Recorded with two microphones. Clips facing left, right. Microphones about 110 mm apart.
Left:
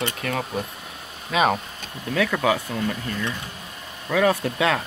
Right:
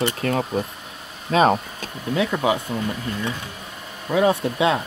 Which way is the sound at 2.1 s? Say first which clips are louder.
Even; 20° right (ahead or behind).